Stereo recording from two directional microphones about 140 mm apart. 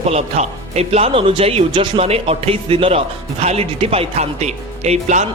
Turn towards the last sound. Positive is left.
turn(degrees=-55)  # may be behind; listen again after turning